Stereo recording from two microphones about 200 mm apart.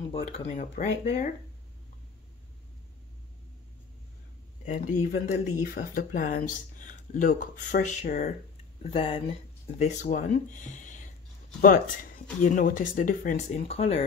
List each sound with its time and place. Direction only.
0.1 s speech: 40° left (ahead or behind)
4.6 s speech: 40° left (ahead or behind)
8.9 s speech: 30° left (ahead or behind)
9.8 s speech: 40° left (ahead or behind)
13.6 s speech: 30° left (ahead or behind)